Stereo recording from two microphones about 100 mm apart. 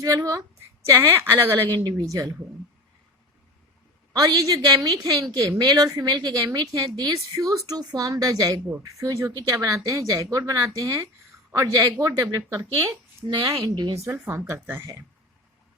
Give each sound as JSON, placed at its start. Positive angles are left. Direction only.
{"t": 0.0, "sound": "a woman's voice", "side_deg": -35}
{"t": 4.1, "sound": "a woman's voice", "side_deg": -40}
{"t": 14.1, "sound": "a woman's voice", "side_deg": -25}